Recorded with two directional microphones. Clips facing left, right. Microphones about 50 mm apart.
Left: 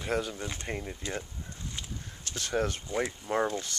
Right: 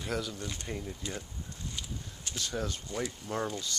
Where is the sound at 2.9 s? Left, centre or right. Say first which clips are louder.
Left 5 dB; left.